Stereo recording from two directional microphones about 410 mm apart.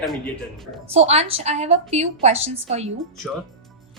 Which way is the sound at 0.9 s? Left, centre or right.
Centre.